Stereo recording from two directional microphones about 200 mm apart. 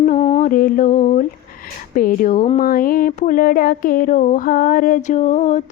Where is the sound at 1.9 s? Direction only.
45° left (ahead or behind).